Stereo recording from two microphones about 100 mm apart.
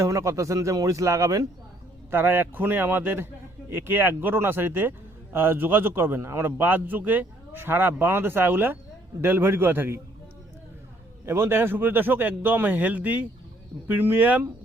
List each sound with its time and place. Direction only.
0.0 s speech: 30° right (ahead or behind)
2.0 s a man's voice: 20° right (ahead or behind)
11.3 s a man's voice: 25° right (ahead or behind)